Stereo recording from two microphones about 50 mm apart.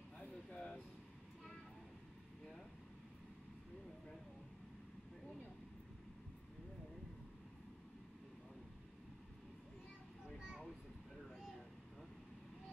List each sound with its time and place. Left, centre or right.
0.5 s air conditioning: left